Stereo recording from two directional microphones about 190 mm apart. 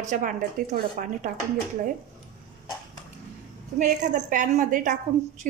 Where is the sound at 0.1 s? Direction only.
45° right (ahead or behind).